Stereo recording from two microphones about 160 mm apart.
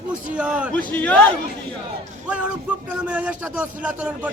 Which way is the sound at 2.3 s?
5° right (ahead or behind).